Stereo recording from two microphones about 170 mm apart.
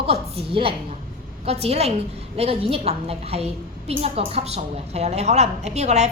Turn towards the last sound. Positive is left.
turn(degrees=-40)  # may be behind; listen again after turning